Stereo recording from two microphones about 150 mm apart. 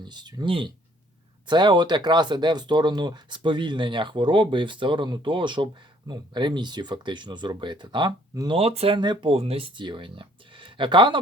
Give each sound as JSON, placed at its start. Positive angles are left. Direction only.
{"t": 0.0, "sound": "speech", "side_deg": -30}